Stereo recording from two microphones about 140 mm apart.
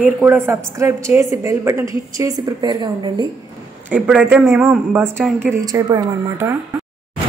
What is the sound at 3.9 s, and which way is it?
A man's voice, 10° right (ahead or behind).